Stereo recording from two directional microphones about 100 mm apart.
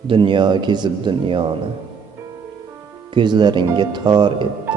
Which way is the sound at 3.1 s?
50° right (ahead or behind).